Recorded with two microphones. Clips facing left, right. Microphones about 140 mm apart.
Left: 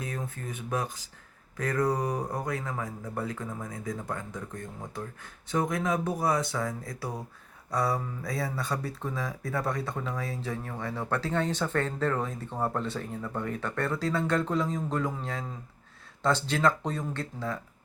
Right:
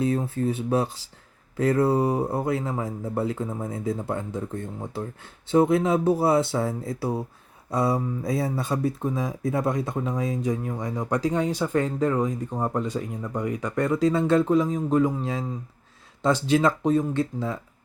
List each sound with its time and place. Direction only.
0.0 s speech: 30° right (ahead or behind)